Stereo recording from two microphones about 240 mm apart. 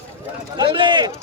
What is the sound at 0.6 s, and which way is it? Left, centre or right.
Speech, centre.